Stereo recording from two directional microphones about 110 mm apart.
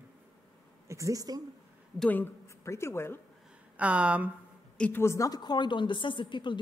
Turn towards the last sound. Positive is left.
turn(degrees=45)  # may be behind; listen again after turning